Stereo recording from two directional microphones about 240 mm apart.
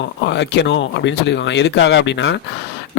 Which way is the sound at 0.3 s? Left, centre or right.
Left.